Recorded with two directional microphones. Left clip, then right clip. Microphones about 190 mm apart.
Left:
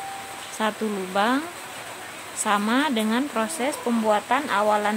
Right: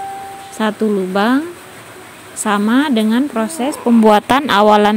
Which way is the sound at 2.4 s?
20° right (ahead or behind).